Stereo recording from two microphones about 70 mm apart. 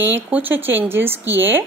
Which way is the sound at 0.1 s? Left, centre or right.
Right.